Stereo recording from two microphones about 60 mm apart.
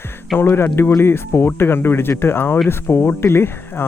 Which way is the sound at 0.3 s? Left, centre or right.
Left.